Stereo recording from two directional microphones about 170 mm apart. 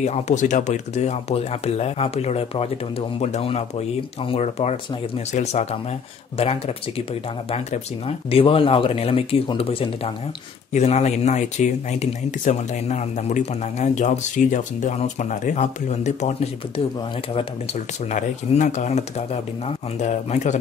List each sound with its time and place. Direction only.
0.0 s speech: 45° left (ahead or behind)
8.3 s speech: 35° left (ahead or behind)
18.1 s speech: 45° left (ahead or behind)